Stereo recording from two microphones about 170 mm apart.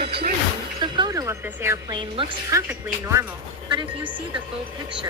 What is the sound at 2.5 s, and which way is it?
Speech, 20° right (ahead or behind).